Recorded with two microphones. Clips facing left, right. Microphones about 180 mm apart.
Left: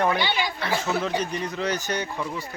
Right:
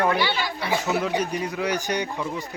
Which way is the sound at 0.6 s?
15° right (ahead or behind).